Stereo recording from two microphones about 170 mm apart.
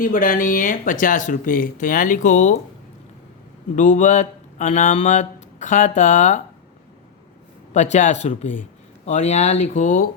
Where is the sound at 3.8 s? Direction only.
45° left (ahead or behind).